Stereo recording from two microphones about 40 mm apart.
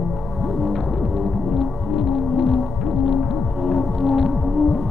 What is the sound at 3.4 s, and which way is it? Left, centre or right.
Music, centre.